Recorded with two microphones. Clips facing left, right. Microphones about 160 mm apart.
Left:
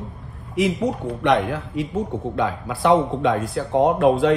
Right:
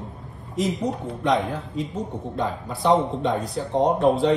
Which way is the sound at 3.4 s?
Centre (ahead or behind).